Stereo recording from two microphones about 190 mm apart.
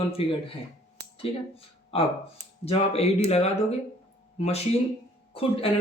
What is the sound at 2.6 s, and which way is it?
Speech, 35° left (ahead or behind).